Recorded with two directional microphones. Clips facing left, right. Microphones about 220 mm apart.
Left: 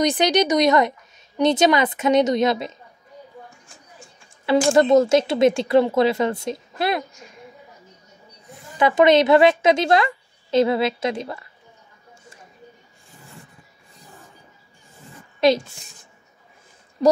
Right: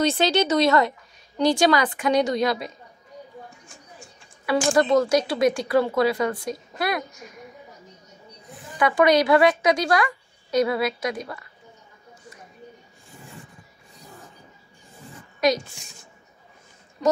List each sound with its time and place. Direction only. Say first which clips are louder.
0.0 s a woman's voice: left 2 dB; 15° left (ahead or behind)
4.5 s a woman's voice: left 4 dB; 25° left (ahead or behind)
8.7 s a woman's voice: left 3 dB; 25° left (ahead or behind)
15.4 s a woman's voice: left 4 dB; 30° left (ahead or behind)